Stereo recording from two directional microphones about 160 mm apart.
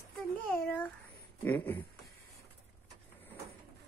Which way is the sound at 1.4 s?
10° left (ahead or behind).